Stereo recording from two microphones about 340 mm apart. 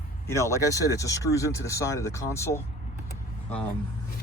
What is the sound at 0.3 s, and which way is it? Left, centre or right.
Speech, centre.